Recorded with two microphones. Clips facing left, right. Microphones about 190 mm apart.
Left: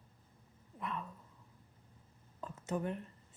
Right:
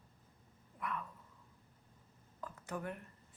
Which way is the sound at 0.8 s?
25° left (ahead or behind).